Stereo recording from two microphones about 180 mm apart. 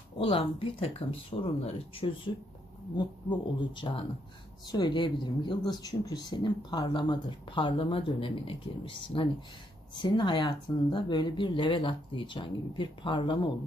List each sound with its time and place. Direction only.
0.2 s speech: 30° left (ahead or behind)